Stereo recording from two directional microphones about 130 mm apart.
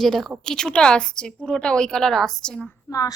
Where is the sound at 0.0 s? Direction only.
5° left (ahead or behind).